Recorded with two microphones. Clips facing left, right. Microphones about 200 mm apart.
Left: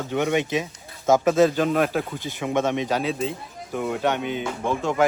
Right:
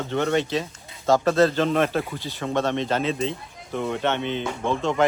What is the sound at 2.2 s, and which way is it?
Speech, 20° left (ahead or behind).